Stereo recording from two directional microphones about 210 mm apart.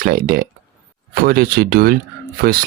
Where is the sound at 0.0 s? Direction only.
45° right (ahead or behind).